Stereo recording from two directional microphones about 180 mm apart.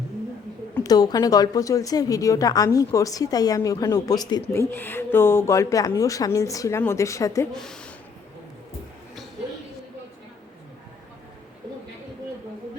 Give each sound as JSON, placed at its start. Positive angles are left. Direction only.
{"t": 0.9, "sound": "a woman's voice", "side_deg": 20}
{"t": 7.5, "sound": "speech", "side_deg": 5}